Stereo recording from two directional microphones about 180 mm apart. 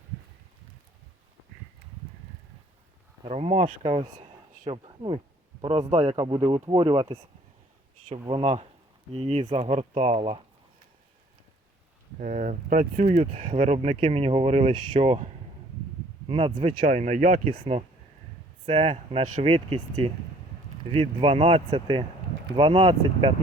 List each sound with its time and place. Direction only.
3.2 s speech: 35° right (ahead or behind)
5.9 s speech: 35° right (ahead or behind)
8.3 s speech: 35° right (ahead or behind)
9.6 s speech: 40° right (ahead or behind)
12.2 s speech: 45° right (ahead or behind)
13.1 s speech: 30° right (ahead or behind)
16.7 s speech: 55° right (ahead or behind)
17.0 s speech: 45° right (ahead or behind)
17.5 s speech: 30° right (ahead or behind)